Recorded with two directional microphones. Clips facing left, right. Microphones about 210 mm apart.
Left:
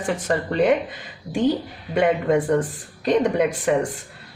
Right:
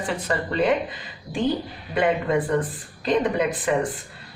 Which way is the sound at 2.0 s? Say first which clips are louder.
Left 3 dB; 45° left (ahead or behind).